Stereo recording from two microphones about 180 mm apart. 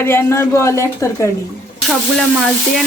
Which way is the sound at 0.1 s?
15° left (ahead or behind).